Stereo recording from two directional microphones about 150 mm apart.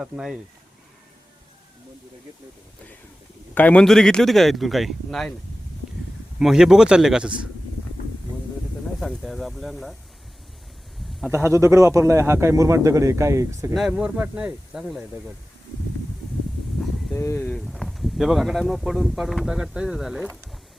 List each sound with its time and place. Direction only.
0.0 s speech: 5° right (ahead or behind)
3.5 s speech: 10° left (ahead or behind)
6.4 s speech: 5° right (ahead or behind)
9.0 s speech: centre (ahead or behind)
11.4 s speech: 20° right (ahead or behind)
13.7 s speech: 5° right (ahead or behind)
17.2 s speech: 15° left (ahead or behind)